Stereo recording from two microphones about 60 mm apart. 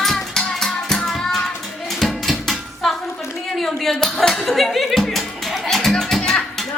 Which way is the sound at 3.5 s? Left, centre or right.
Centre.